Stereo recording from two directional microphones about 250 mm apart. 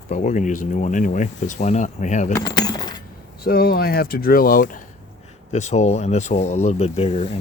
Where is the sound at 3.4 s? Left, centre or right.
Left.